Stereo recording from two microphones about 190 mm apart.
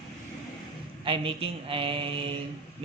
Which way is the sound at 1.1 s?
30° right (ahead or behind).